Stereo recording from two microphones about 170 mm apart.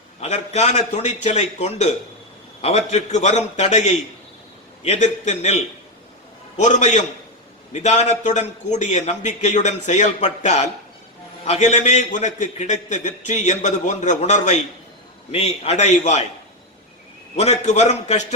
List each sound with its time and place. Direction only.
0.2 s a man's voice: 40° left (ahead or behind)
6.6 s a man's voice: 45° left (ahead or behind)
17.3 s a man's voice: 40° left (ahead or behind)